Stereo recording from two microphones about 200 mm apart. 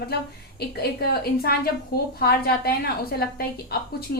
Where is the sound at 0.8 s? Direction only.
50° left (ahead or behind).